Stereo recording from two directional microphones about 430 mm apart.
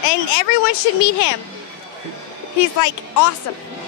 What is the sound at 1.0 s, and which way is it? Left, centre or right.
Speech, left.